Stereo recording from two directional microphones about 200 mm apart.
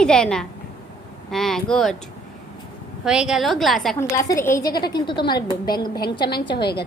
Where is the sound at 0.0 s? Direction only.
5° left (ahead or behind).